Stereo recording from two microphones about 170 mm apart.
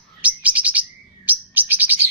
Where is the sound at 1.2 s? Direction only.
10° right (ahead or behind).